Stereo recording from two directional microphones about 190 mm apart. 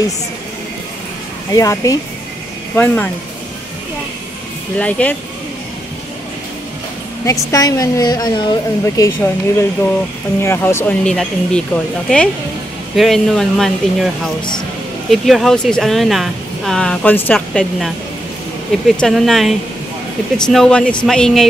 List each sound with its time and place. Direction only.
1.5 s a woman's voice: 15° left (ahead or behind)
4.7 s a woman's voice: 5° left (ahead or behind)
7.2 s a woman's voice: 20° left (ahead or behind); by 21.5 s centre (ahead or behind)